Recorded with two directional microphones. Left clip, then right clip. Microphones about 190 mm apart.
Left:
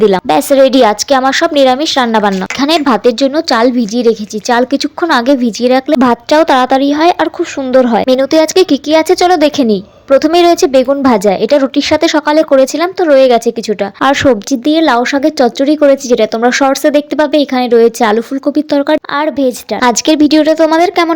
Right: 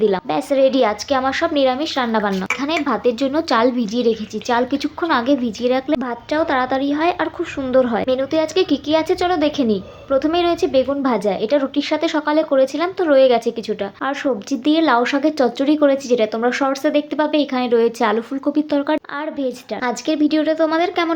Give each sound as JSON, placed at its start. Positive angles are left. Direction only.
{"t": 0.0, "sound": "a woman's voice", "side_deg": 50}
{"t": 14.0, "sound": "speech", "side_deg": 50}